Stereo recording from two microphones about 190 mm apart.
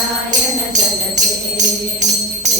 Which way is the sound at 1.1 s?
40° right (ahead or behind).